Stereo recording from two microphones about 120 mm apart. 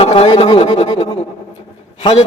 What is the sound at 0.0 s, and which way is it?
Speech, 50° left (ahead or behind).